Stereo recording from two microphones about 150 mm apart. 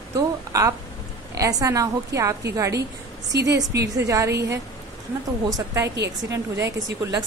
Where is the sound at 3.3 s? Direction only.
90° right.